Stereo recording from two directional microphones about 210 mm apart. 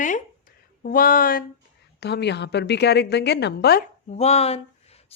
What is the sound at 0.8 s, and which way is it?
Speech, 40° left (ahead or behind).